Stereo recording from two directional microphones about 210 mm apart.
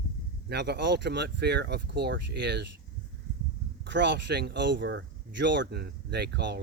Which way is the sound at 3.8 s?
55° right (ahead or behind).